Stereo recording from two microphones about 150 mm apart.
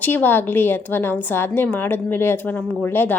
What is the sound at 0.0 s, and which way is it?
A woman's voice, 10° left (ahead or behind).